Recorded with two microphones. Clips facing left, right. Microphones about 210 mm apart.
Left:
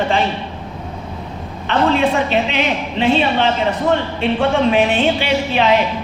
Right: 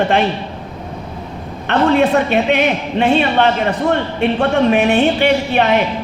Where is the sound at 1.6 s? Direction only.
60° right (ahead or behind).